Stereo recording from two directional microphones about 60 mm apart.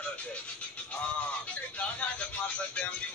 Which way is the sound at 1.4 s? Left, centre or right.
Left.